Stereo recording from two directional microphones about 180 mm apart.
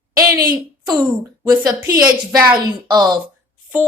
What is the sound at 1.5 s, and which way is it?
Speech, 20° right (ahead or behind).